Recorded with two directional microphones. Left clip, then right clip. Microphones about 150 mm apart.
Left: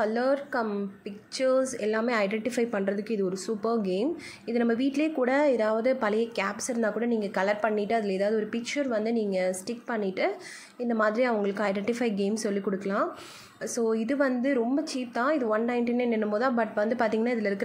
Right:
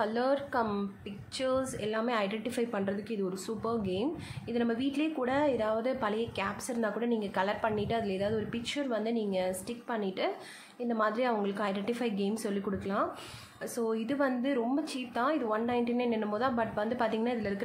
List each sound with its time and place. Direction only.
0.0 s a woman's voice: 25° left (ahead or behind)